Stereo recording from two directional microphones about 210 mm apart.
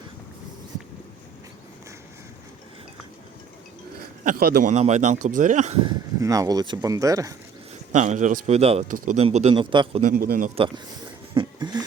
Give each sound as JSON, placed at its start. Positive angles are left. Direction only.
{"t": 4.2, "sound": "a man's voice", "side_deg": -40}
{"t": 4.7, "sound": "speech", "side_deg": -35}
{"t": 5.8, "sound": "speech", "side_deg": -15}
{"t": 7.9, "sound": "speech", "side_deg": -35}
{"t": 10.0, "sound": "speech", "side_deg": -40}
{"t": 11.3, "sound": "a sound", "side_deg": -20}